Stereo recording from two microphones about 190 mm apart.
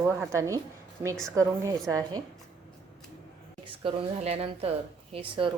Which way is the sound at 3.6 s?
25° right (ahead or behind).